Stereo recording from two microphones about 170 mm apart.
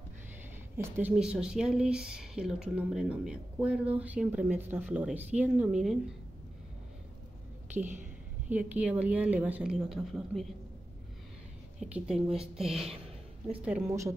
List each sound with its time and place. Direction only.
0.9 s speech: 10° right (ahead or behind)
8.5 s a woman's voice: 10° right (ahead or behind)
11.8 s a woman's voice: 5° right (ahead or behind)